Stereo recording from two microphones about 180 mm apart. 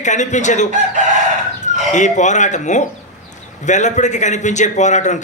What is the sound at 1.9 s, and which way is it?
A man's voice, 40° left (ahead or behind).